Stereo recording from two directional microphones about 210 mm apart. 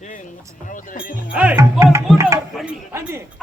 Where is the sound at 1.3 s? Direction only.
5° right (ahead or behind).